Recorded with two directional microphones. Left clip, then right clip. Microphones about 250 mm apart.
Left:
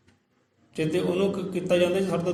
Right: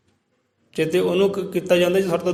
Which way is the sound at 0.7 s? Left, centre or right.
Right.